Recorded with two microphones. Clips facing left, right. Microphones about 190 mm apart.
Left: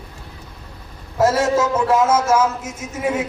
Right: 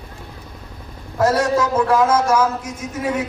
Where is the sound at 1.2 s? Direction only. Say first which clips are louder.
Left 1 dB; 25° left (ahead or behind).